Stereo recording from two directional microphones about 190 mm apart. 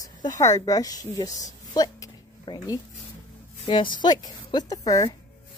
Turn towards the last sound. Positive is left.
turn(degrees=20)  # may be behind; listen again after turning